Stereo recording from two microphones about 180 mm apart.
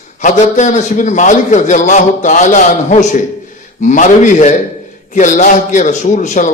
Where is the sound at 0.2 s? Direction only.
45° left (ahead or behind).